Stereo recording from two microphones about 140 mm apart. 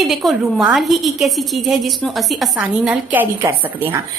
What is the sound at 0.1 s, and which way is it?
A woman's voice, centre (ahead or behind).